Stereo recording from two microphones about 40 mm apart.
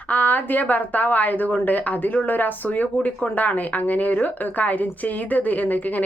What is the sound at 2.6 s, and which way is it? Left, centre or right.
A woman's voice, left.